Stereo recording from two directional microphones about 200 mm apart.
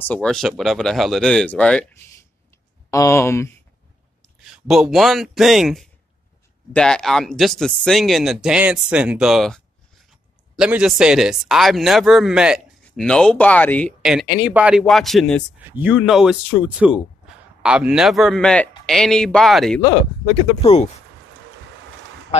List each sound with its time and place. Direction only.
0.1 s speech: 5° left (ahead or behind)
2.9 s speech: 15° left (ahead or behind)
4.2 s a man's voice: centre (ahead or behind)
14.0 s speech: 5° right (ahead or behind)
20.6 s speech: 35° left (ahead or behind)
22.3 s speech: 35° left (ahead or behind)